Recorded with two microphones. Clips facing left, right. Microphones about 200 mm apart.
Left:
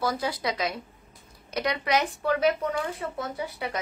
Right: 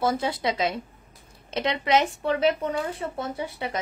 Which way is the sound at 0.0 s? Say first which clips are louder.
Right 3 dB; 25° right (ahead or behind).